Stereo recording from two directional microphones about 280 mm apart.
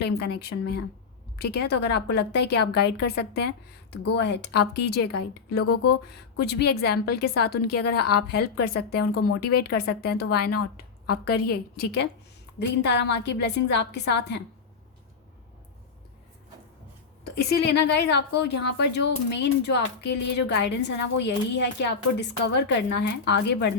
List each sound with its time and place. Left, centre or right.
0.0 s a woman's voice: left
5.8 s speech: left
6.4 s a woman's voice: left
10.5 s a woman's voice: left
11.3 s a woman's voice: left
17.5 s a woman's voice: left